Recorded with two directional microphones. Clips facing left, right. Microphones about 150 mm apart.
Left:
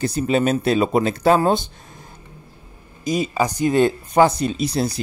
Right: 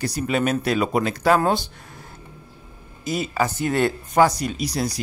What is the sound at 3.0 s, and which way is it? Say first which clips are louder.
Speech: left 3 dB; 15° left (ahead or behind).